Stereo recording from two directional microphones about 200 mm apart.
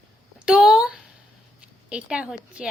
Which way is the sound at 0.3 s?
5° right (ahead or behind).